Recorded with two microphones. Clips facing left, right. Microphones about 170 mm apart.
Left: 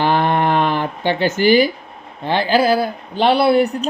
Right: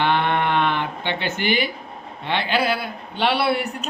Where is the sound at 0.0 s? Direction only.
35° left (ahead or behind).